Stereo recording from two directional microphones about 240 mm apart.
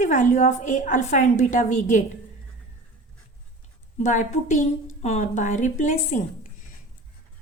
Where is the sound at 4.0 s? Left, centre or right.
Left.